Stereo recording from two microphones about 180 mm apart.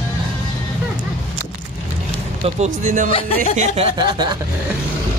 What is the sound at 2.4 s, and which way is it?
Speech, 40° right (ahead or behind).